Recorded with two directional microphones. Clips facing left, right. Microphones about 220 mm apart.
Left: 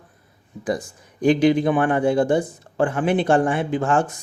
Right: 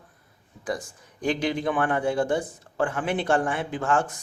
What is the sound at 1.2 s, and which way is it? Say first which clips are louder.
Speech: left 9 dB; 15° left (ahead or behind).